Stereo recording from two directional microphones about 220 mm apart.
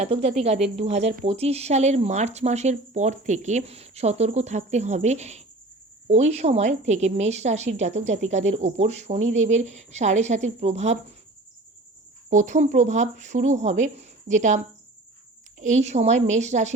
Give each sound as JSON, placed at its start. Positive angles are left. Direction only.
{"t": 0.0, "sound": "a woman's voice", "side_deg": -30}
{"t": 12.3, "sound": "a woman's voice", "side_deg": -35}